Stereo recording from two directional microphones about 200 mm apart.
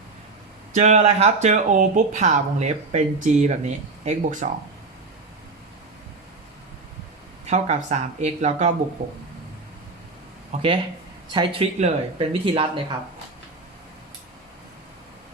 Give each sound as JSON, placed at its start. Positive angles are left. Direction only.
{"t": 0.7, "sound": "speech", "side_deg": -40}
{"t": 7.4, "sound": "speech", "side_deg": -35}
{"t": 10.5, "sound": "speech", "side_deg": -35}